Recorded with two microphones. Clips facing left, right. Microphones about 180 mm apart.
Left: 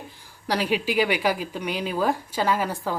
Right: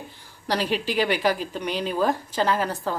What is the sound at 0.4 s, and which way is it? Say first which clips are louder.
Speech: left 1 dB; 10° left (ahead or behind).